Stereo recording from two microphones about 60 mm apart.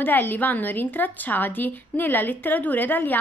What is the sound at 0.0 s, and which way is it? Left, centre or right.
A woman's voice, left.